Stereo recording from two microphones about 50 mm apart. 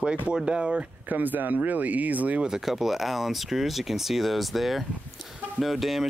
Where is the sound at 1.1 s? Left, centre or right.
Right.